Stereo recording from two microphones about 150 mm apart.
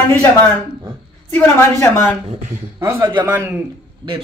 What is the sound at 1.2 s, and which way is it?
Speech, 20° left (ahead or behind).